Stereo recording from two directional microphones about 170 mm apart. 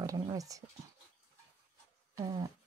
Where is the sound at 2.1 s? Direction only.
25° right (ahead or behind).